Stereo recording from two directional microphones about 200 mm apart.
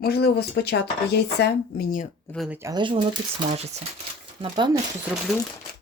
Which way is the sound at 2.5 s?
15° right (ahead or behind).